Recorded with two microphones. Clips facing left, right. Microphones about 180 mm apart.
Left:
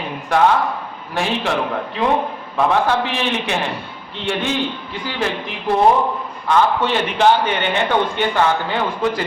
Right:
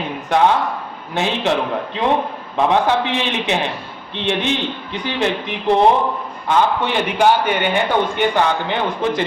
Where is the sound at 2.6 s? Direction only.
20° right (ahead or behind).